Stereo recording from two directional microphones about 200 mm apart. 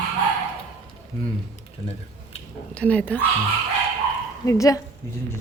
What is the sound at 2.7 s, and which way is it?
Speech, 5° left (ahead or behind).